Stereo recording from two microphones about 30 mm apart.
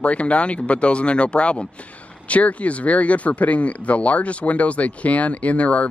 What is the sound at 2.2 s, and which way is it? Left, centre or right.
Speech, left.